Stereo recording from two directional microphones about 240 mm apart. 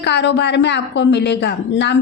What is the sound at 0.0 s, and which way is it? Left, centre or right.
Speech, left.